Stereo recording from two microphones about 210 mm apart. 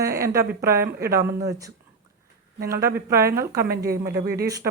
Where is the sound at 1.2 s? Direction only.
15° right (ahead or behind).